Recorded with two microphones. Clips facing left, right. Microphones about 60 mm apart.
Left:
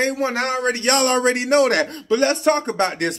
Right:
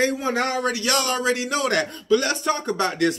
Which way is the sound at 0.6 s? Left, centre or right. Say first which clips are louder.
Left 4 dB; left.